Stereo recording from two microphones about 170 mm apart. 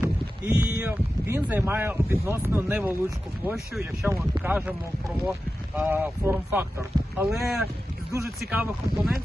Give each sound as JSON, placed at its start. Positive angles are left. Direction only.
{"t": 0.0, "sound": "speech", "side_deg": -10}
{"t": 5.7, "sound": "speech", "side_deg": -10}